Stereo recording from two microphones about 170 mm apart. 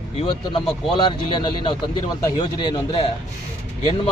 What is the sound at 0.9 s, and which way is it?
A man's voice, 30° left (ahead or behind).